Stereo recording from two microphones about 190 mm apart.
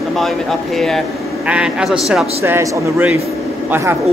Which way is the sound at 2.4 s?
15° right (ahead or behind).